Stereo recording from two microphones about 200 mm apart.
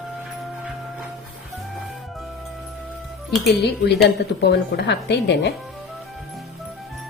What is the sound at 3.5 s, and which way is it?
Speech, 55° left (ahead or behind).